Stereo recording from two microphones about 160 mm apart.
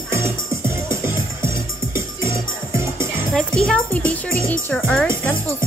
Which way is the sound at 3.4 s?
5° left (ahead or behind).